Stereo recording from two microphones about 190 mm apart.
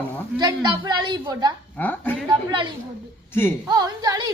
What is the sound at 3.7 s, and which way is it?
Speech, 20° right (ahead or behind).